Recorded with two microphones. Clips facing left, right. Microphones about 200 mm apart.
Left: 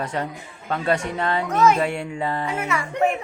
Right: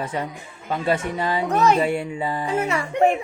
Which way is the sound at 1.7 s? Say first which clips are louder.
Right 2 dB; centre (ahead or behind).